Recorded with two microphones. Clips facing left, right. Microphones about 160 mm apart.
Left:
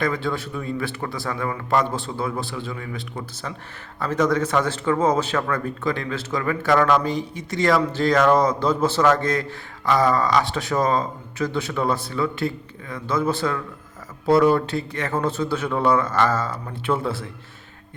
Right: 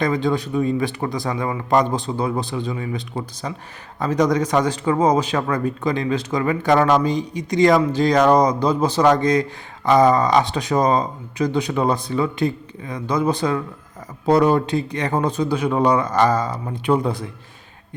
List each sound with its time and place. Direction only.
0.0 s a man's voice: 15° right (ahead or behind)